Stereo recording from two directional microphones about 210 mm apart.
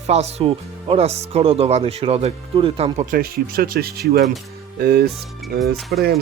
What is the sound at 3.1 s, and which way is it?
Speech, 45° right (ahead or behind).